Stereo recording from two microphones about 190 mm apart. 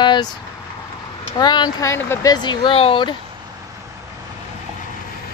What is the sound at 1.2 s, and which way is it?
Speech, 25° left (ahead or behind).